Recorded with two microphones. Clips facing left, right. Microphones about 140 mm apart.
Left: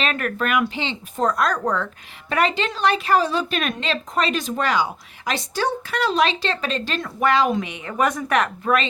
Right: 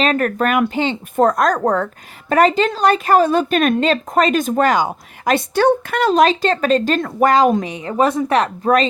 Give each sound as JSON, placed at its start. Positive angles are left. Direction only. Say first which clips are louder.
{"t": 0.0, "sound": "a woman's voice", "louder": "right 7 dB", "side_deg": -40}